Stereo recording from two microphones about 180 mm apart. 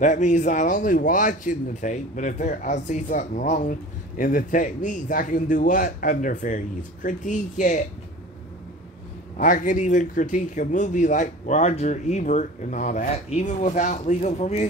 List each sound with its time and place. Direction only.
0.0 s a man's voice: 45° left (ahead or behind)
9.4 s a man's voice: 45° left (ahead or behind)